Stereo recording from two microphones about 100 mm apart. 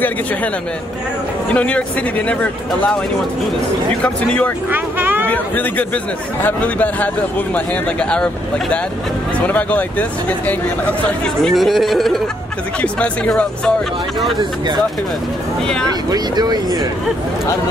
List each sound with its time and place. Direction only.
1.5 s a man's voice: 15° left (ahead or behind)
4.0 s a man's voice: 15° left (ahead or behind)
4.6 s vehicle: 20° right (ahead or behind)
5.3 s a man's voice: 15° left (ahead or behind)
11.4 s speech: centre (ahead or behind)
12.8 s a man's voice: 10° left (ahead or behind)
15.6 s speech: 5° left (ahead or behind)
16.1 s speech: 40° right (ahead or behind)